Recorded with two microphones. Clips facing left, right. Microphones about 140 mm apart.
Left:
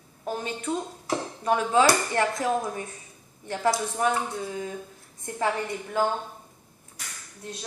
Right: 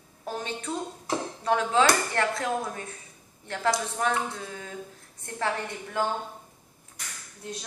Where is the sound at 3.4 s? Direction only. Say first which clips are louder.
Left 2 dB; 15° left (ahead or behind).